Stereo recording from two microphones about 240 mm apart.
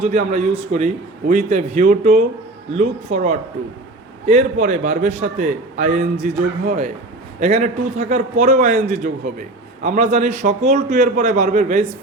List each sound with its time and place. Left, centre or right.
0.1 s a man's voice: right